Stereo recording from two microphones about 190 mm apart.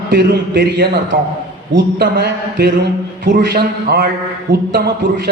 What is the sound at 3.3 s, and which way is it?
A man's voice, 50° right (ahead or behind).